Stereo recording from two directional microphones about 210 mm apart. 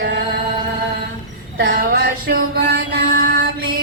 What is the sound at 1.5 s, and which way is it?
Music, 50° right (ahead or behind).